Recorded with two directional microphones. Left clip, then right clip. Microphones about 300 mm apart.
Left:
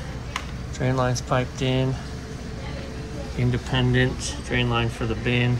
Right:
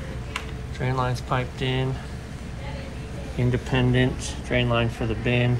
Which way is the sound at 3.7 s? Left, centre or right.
Centre.